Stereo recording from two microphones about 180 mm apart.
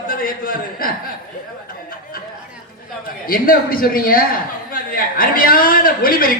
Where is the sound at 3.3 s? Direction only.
50° left (ahead or behind).